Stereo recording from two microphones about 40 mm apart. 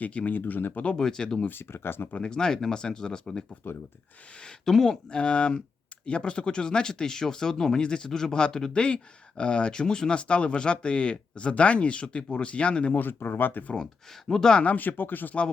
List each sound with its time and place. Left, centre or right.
0.0 s speech: left
0.3 s speech: left
0.9 s speech: centre
1.5 s speech: left
2.2 s speech: centre
3.6 s speech: left
4.6 s speech: centre
5.0 s speech: left
13.0 s speech: left
14.3 s speech: centre
14.8 s speech: left